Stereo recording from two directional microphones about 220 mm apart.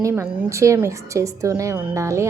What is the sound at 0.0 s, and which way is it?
Speech, 10° right (ahead or behind).